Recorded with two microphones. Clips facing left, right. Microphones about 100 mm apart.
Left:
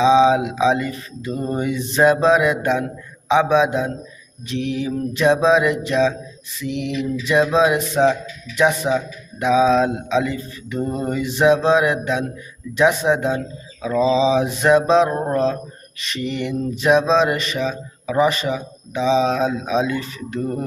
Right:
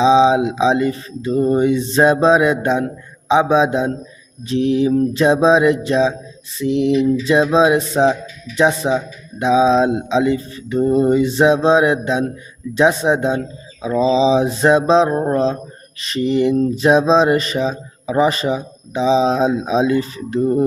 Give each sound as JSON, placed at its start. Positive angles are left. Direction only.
{"t": 0.0, "sound": "speech", "side_deg": -30}
{"t": 4.4, "sound": "mantra", "side_deg": -30}
{"t": 8.5, "sound": "speech", "side_deg": -30}
{"t": 16.0, "sound": "mantra", "side_deg": -35}
{"t": 20.4, "sound": "speech", "side_deg": -25}